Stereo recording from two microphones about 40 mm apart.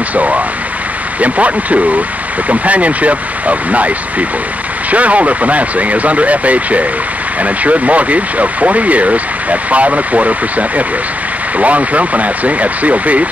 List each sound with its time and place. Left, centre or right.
0.1 s a sound: right
1.2 s speech: right
11.5 s speech: right